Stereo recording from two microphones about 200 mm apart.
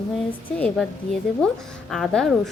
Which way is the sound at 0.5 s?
5° left (ahead or behind).